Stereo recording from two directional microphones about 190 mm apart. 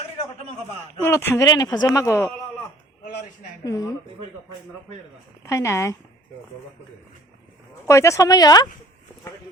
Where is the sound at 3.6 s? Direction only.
20° left (ahead or behind).